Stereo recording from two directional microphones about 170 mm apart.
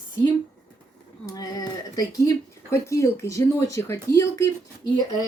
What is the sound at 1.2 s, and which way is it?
Speech, 20° left (ahead or behind).